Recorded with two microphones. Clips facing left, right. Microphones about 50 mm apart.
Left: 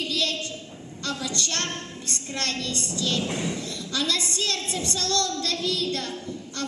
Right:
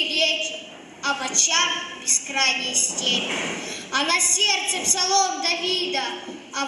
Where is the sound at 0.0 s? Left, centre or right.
Right.